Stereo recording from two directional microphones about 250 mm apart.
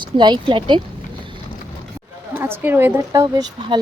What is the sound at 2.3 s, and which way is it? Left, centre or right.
A woman's voice, centre.